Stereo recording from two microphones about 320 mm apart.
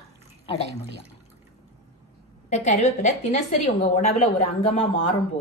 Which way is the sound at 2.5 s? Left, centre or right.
Left.